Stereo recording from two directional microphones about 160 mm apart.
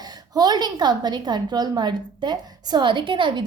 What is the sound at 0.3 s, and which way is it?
A woman's voice, 25° right (ahead or behind).